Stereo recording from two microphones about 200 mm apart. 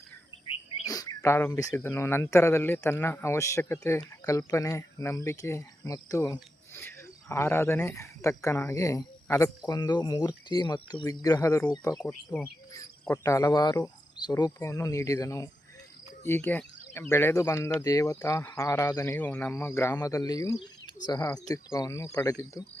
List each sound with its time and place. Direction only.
0.9 s speech: 20° left (ahead or behind)